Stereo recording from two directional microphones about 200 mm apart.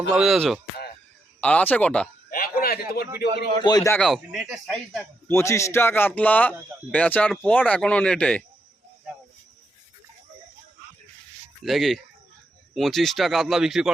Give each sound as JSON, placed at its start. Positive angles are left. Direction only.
{"t": 0.1, "sound": "speech", "side_deg": 0}
{"t": 2.3, "sound": "a sound", "side_deg": 50}
{"t": 3.6, "sound": "a man's voice", "side_deg": 20}
{"t": 3.9, "sound": "speech", "side_deg": 0}
{"t": 5.3, "sound": "speech", "side_deg": 15}
{"t": 11.6, "sound": "speech", "side_deg": 0}